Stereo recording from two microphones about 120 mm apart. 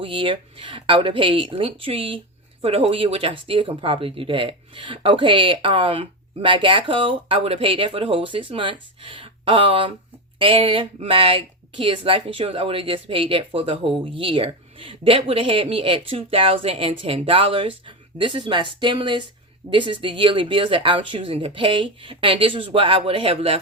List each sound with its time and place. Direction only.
0.0 s speech: 45° right (ahead or behind)